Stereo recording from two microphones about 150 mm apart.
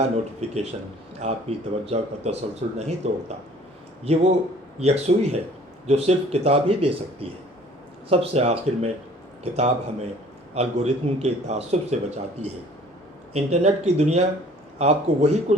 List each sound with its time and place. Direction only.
0.3 s speech: 45° right (ahead or behind)
13.3 s speech: 45° right (ahead or behind)